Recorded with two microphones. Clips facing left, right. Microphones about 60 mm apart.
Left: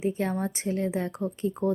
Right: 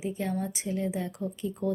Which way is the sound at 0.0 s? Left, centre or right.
Left.